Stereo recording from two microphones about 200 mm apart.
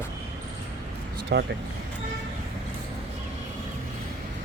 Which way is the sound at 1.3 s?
60° right (ahead or behind).